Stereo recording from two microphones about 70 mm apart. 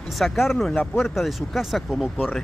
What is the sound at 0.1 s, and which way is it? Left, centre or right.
Speech, centre.